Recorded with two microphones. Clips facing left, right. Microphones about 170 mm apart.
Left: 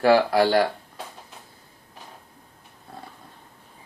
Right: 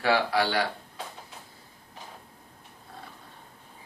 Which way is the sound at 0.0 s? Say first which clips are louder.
Left 7 dB; 45° left (ahead or behind).